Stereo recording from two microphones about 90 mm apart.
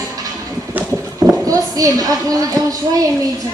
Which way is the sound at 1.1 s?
40° right (ahead or behind).